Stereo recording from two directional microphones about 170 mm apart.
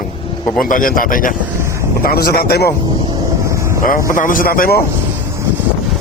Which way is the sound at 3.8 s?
55° left (ahead or behind).